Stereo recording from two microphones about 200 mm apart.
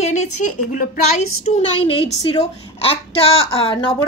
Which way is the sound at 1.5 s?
30° left (ahead or behind).